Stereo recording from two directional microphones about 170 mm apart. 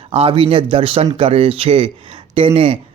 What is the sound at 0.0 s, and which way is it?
Speech, 35° right (ahead or behind).